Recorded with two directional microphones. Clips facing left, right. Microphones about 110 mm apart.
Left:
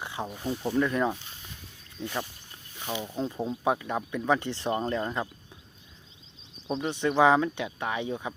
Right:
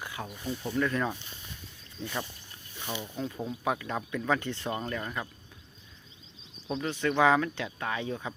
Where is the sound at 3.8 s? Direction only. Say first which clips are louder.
Left 2 dB; 15° left (ahead or behind).